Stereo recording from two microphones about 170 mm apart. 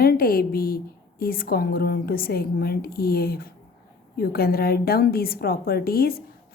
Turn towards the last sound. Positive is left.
turn(degrees=60)  # may be behind; listen again after turning